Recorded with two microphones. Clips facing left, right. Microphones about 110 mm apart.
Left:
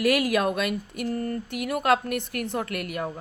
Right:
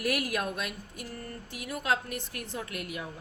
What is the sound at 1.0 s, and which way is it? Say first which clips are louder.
A woman's voice: left 14 dB; 55° left (ahead or behind).